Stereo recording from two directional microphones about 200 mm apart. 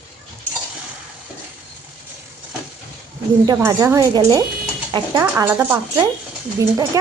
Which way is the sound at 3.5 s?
15° right (ahead or behind).